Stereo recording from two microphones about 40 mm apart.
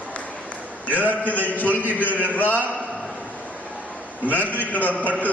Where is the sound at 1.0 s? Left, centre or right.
Left.